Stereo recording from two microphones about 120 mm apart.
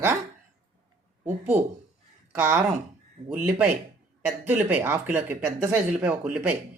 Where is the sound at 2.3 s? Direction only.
20° right (ahead or behind).